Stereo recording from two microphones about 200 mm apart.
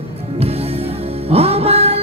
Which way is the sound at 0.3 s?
30° right (ahead or behind).